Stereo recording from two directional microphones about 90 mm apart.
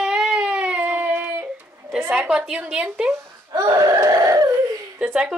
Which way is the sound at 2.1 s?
10° right (ahead or behind).